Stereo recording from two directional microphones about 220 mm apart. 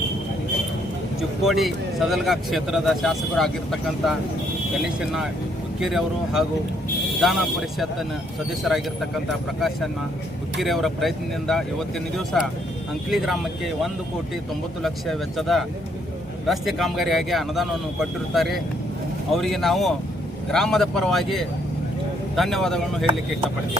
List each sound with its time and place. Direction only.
1.5 s speech: centre (ahead or behind)
9.6 s speech: centre (ahead or behind)